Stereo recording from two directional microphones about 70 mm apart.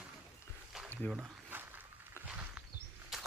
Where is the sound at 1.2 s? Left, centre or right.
Right.